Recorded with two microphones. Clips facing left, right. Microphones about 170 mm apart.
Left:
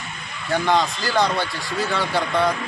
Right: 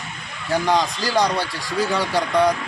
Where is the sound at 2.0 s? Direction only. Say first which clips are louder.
Right 2 dB; 15° right (ahead or behind).